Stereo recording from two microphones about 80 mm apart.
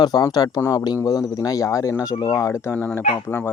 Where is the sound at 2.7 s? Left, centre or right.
Left.